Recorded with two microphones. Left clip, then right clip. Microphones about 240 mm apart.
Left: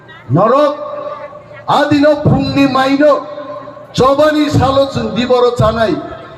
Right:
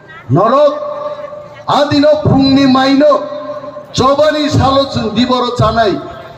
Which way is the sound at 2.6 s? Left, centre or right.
Right.